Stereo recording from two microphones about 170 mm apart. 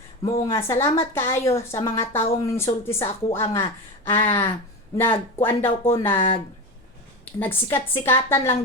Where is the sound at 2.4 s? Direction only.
15° left (ahead or behind).